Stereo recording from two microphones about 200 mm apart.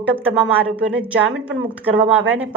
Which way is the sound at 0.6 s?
70° right (ahead or behind).